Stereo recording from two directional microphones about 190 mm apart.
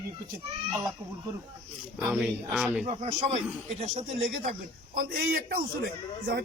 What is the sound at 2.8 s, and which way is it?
Speech, 30° right (ahead or behind).